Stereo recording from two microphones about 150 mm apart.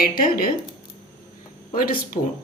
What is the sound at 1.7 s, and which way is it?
Speech, 65° left (ahead or behind).